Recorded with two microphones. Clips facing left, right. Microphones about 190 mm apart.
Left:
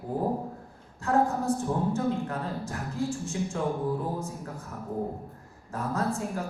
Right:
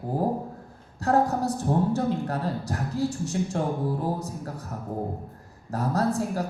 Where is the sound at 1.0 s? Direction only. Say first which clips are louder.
Right 3 dB; 40° right (ahead or behind).